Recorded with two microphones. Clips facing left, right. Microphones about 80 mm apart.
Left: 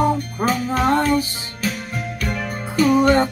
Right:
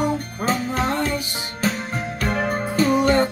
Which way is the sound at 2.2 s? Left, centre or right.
Right.